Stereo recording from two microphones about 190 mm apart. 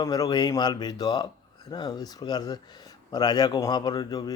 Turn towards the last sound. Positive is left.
turn(degrees=20)  # may be behind; listen again after turning